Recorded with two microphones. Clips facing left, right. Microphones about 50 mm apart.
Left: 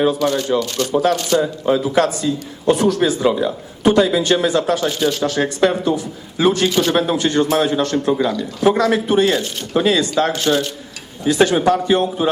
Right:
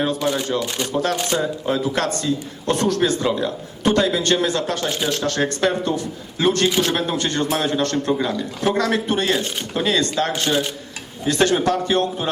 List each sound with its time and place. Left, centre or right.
0.2 s speech: centre
1.4 s a man's voice: centre